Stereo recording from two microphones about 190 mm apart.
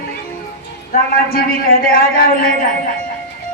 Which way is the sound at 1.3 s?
50° left (ahead or behind).